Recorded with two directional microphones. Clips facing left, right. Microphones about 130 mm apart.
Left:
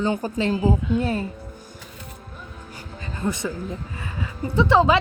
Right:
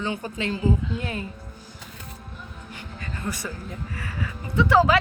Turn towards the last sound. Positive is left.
turn(degrees=25)  # may be behind; listen again after turning